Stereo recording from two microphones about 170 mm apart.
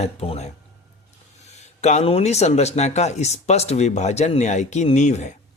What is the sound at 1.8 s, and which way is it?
Speech, 40° left (ahead or behind).